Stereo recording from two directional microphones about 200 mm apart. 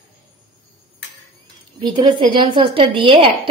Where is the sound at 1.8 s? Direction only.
25° right (ahead or behind).